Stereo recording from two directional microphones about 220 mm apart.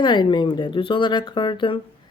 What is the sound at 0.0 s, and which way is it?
A woman's voice, 20° left (ahead or behind).